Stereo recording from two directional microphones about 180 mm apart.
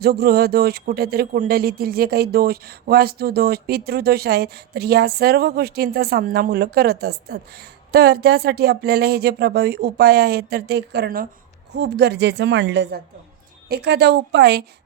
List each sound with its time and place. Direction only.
0.0 s speech: 60° right (ahead or behind)
11.7 s a woman's voice: 70° right (ahead or behind)
13.7 s a woman's voice: 65° right (ahead or behind)